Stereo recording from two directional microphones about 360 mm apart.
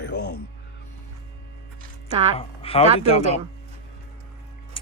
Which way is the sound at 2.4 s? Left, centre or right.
Centre.